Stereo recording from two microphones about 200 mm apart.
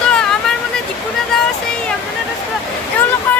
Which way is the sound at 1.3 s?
Centre (ahead or behind).